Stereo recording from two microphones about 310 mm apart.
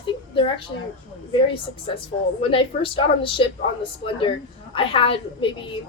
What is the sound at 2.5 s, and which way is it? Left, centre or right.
A woman's voice, centre.